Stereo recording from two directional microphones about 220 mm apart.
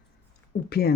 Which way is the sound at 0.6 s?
45° left (ahead or behind).